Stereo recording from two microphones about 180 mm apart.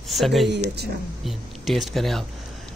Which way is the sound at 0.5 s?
70° right (ahead or behind).